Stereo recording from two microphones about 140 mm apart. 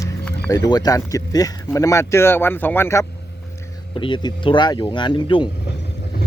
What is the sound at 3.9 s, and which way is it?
Speech, 35° left (ahead or behind).